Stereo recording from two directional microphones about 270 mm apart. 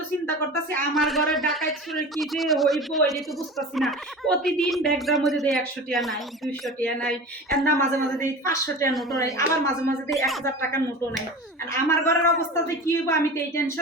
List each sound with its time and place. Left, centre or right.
0.9 s a man's voice: centre
8.9 s a man's voice: centre
9.1 s a woman's voice: centre